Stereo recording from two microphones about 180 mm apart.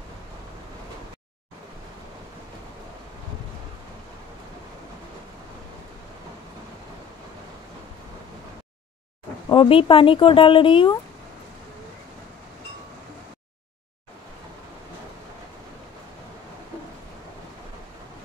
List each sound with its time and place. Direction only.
9.5 s speech: 30° left (ahead or behind)